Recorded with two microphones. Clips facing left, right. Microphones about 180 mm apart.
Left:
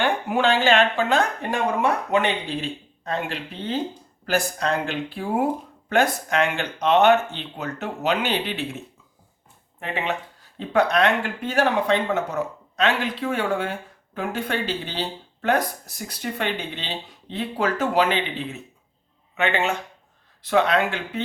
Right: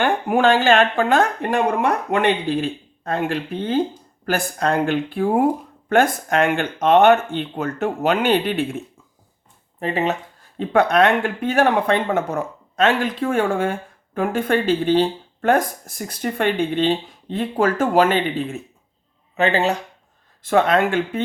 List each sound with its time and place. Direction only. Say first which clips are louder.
0.0 s speech: right 4 dB; 50° right (ahead or behind)
9.8 s speech: right 6 dB; 40° right (ahead or behind)
10.6 s speech: right 4 dB; 55° right (ahead or behind)
19.4 s speech: right 4 dB; 35° right (ahead or behind)
20.4 s speech: right 3 dB; 50° right (ahead or behind)